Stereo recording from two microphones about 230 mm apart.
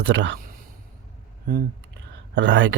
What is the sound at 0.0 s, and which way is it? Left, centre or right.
Speech, right.